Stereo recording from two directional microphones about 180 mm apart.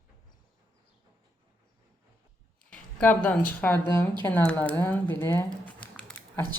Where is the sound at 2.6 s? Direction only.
5° left (ahead or behind).